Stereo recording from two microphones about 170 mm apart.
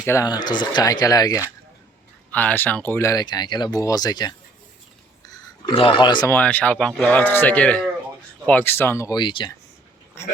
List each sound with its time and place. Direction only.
0.0 s speech: 15° left (ahead or behind)
2.3 s speech: 10° left (ahead or behind)
5.3 s a sound: 30° left (ahead or behind)
6.2 s speech: 10° left (ahead or behind); by 9.5 s 30° left (ahead or behind)